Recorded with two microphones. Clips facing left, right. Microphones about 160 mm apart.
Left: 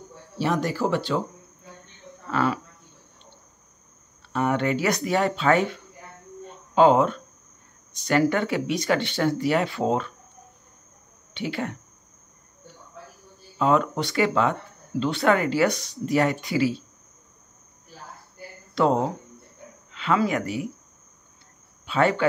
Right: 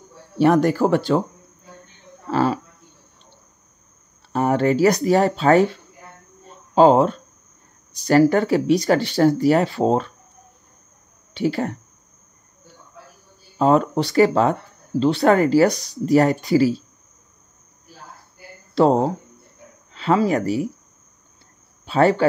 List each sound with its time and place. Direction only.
0.4 s speech: 55° right (ahead or behind)
2.2 s a sound: 30° right (ahead or behind)
4.3 s speech: 35° right (ahead or behind)
6.4 s a sound: 35° right (ahead or behind)
8.0 s speech: 35° right (ahead or behind)
11.3 s speech: 40° right (ahead or behind)
13.6 s speech: 35° right (ahead or behind)
18.8 s speech: 35° right (ahead or behind)
21.8 s speech: 35° right (ahead or behind)